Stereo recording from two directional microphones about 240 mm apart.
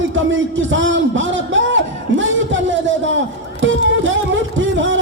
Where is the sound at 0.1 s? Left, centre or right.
Right.